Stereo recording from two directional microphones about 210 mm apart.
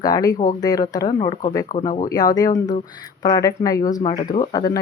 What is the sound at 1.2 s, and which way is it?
Speech, 35° left (ahead or behind).